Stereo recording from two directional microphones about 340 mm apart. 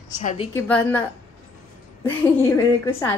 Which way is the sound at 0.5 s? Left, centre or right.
Centre.